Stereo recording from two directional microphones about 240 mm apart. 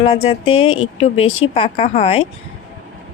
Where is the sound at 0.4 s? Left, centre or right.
Left.